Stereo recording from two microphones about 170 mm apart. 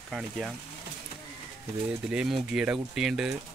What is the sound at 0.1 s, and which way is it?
Speech, 5° left (ahead or behind).